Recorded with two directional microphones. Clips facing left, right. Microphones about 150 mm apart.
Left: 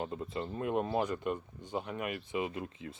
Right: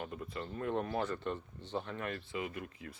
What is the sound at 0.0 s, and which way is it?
Speech, 25° left (ahead or behind).